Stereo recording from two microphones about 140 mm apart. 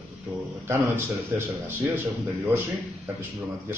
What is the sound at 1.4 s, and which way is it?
Speech, 15° right (ahead or behind).